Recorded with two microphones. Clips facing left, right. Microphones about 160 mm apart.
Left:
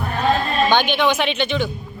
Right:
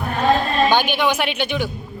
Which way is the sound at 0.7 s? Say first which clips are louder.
Left 1 dB; 10° right (ahead or behind).